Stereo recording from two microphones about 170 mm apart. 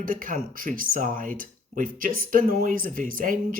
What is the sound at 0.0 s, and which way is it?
Speech, 55° right (ahead or behind).